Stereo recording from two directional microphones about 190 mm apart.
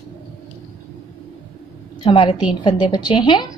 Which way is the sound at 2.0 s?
25° left (ahead or behind).